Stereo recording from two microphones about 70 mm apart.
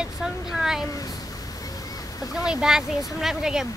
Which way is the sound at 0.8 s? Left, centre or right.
Left.